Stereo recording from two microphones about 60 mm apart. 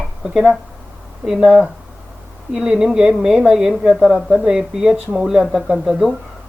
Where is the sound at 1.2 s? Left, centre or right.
Centre.